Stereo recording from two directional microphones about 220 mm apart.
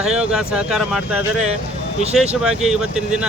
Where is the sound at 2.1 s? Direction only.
5° right (ahead or behind).